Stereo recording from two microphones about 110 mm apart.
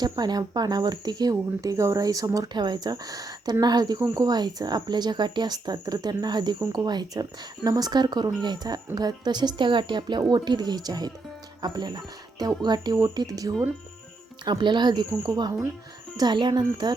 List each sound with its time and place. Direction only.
0.0 s speech: 40° right (ahead or behind)